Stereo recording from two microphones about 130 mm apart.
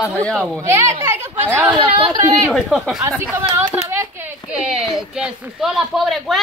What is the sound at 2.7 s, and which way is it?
Speech, centre (ahead or behind).